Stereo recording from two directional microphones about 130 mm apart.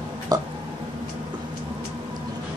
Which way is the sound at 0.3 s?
30° right (ahead or behind).